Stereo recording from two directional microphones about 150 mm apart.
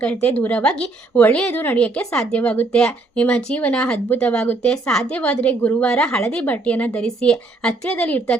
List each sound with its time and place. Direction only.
0.0 s a woman's voice: 10° left (ahead or behind)